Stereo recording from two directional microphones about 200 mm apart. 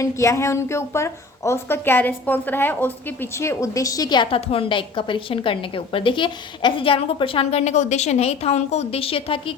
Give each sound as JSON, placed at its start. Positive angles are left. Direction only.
{"t": 0.0, "sound": "a woman's voice", "side_deg": 15}